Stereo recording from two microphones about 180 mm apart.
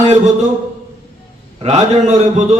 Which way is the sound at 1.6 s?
35° right (ahead or behind).